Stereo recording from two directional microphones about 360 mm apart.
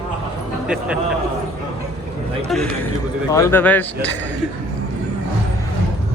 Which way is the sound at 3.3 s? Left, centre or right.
Centre.